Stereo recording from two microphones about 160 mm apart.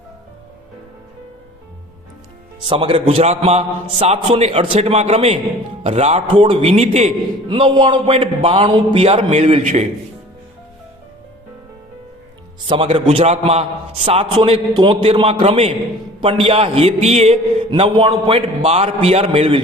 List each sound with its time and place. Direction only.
2.6 s a man's voice: 35° right (ahead or behind)
7.5 s a man's voice: 30° right (ahead or behind)
12.6 s a man's voice: 35° right (ahead or behind)